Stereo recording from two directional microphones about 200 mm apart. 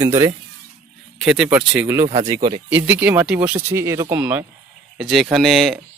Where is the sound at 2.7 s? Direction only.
10° right (ahead or behind).